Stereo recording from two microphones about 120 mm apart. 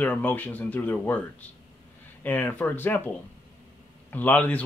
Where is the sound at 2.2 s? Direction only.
15° left (ahead or behind).